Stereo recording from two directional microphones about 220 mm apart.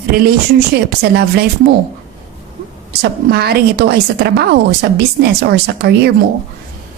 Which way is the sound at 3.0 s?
45° right (ahead or behind).